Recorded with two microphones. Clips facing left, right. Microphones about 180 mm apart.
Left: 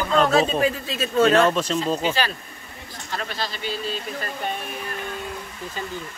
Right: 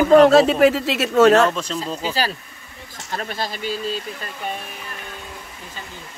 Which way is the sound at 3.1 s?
45° right (ahead or behind).